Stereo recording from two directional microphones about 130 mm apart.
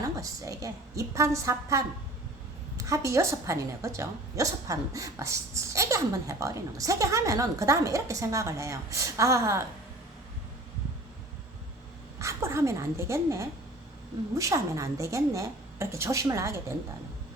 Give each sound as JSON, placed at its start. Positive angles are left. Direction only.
{"t": 0.0, "sound": "a woman's voice", "side_deg": -25}
{"t": 12.2, "sound": "a woman's voice", "side_deg": -20}